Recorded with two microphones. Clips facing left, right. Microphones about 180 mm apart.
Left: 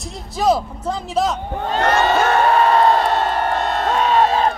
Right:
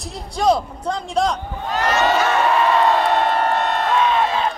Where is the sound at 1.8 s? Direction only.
50° left (ahead or behind).